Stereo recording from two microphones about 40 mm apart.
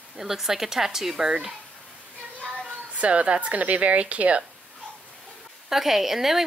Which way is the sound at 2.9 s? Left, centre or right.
Right.